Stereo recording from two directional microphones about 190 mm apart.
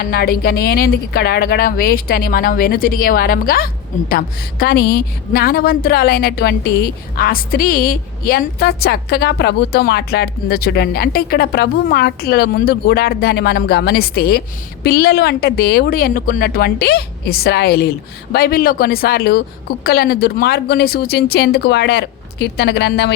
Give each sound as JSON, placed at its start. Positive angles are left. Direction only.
{"t": 0.0, "sound": "a woman's voice", "side_deg": 55}